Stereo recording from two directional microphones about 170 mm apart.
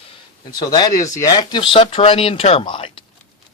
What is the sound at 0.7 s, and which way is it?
Speech, 20° left (ahead or behind).